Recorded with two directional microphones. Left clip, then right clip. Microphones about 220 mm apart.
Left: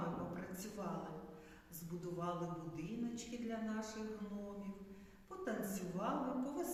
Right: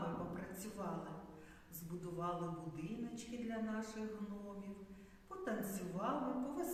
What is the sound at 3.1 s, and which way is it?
Speech, centre (ahead or behind).